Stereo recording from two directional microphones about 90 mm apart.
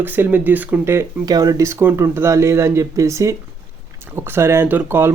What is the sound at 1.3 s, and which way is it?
Speech, 45° right (ahead or behind).